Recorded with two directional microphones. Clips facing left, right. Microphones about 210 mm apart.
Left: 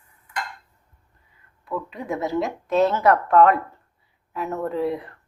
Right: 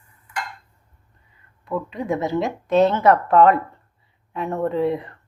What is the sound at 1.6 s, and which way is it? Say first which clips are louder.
A woman's voice: right 4 dB; centre (ahead or behind).